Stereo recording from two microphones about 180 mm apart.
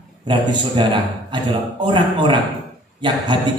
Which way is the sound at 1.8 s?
25° right (ahead or behind).